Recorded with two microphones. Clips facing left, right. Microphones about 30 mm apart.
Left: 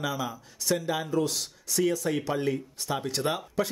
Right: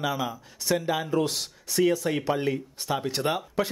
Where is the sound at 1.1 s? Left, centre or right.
Right.